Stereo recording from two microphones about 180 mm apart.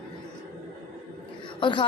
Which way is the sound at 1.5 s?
25° left (ahead or behind).